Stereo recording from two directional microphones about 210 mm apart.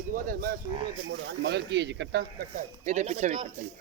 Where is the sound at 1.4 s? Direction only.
55° right (ahead or behind).